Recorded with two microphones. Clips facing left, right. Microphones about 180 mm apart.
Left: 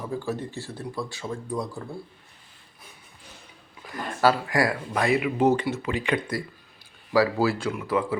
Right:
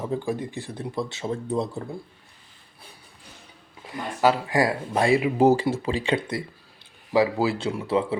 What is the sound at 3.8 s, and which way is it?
Speech, 20° right (ahead or behind).